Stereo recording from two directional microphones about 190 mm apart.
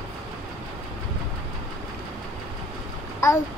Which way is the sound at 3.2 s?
15° left (ahead or behind).